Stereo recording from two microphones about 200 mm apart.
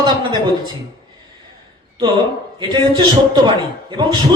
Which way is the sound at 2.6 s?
20° right (ahead or behind).